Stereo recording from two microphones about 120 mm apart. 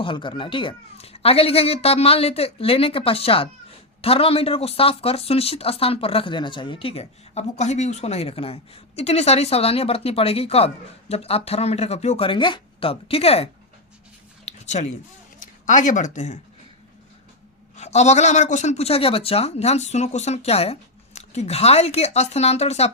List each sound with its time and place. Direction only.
0.0 s speech: 45° left (ahead or behind)
14.4 s a sound: 70° left (ahead or behind)
15.4 s speech: 90° left
17.7 s speech: 70° left (ahead or behind)